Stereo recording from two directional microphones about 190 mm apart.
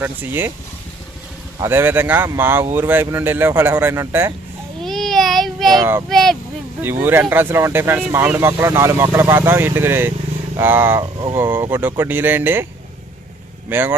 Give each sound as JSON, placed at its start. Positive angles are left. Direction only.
{"t": 0.0, "sound": "speech", "side_deg": -10}
{"t": 1.6, "sound": "speech", "side_deg": -10}
{"t": 4.8, "sound": "a sound", "side_deg": 0}
{"t": 5.7, "sound": "speech", "side_deg": -15}
{"t": 6.1, "sound": "speech", "side_deg": 0}
{"t": 7.0, "sound": "speech", "side_deg": -10}
{"t": 13.7, "sound": "speech", "side_deg": -10}